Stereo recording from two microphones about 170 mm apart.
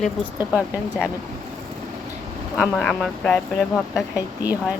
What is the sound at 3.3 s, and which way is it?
Speech, 15° left (ahead or behind).